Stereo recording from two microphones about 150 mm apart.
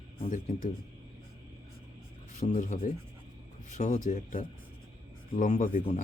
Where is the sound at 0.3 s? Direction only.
60° left (ahead or behind).